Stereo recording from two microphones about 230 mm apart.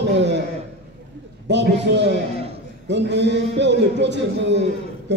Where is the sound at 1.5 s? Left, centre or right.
Right.